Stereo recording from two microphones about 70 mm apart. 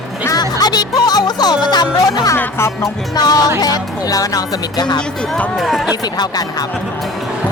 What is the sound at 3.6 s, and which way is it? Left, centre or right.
Speech, left.